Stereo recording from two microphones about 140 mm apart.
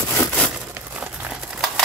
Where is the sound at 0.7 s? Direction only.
10° right (ahead or behind).